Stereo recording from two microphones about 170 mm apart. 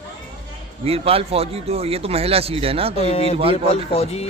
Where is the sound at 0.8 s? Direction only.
35° right (ahead or behind).